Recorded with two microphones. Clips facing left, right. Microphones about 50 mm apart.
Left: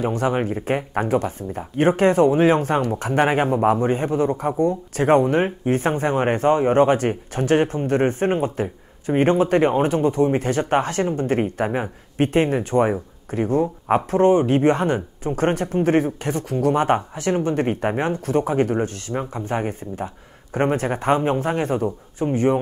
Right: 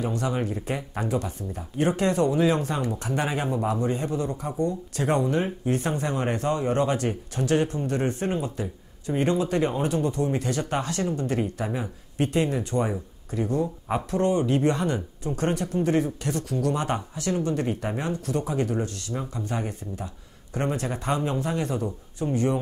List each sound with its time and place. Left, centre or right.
0.0 s speech: left